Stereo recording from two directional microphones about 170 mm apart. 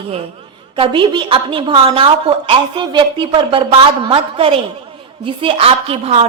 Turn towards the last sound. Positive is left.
turn(degrees=-35)  # may be behind; listen again after turning